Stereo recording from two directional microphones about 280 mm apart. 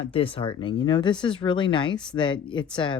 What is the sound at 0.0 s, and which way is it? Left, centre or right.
Speech, centre.